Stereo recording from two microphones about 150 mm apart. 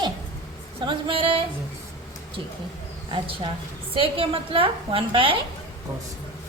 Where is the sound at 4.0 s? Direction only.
35° right (ahead or behind).